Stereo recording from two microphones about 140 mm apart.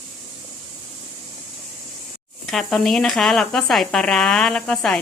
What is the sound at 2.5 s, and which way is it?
Speech, centre (ahead or behind).